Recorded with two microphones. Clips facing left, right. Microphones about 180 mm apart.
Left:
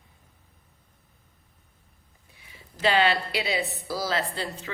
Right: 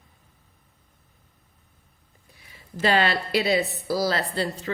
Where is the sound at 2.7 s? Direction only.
45° right (ahead or behind).